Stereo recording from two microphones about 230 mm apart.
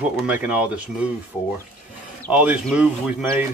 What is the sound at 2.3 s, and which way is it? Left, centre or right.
Speech, centre.